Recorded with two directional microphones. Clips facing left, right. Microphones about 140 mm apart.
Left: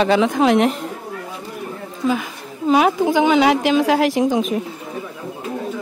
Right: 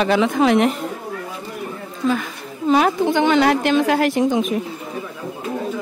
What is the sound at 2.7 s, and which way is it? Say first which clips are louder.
A woman's voice: left 1 dB; 5° left (ahead or behind).